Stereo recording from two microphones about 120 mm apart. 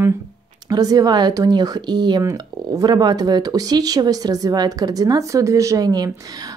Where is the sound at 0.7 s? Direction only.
30° right (ahead or behind).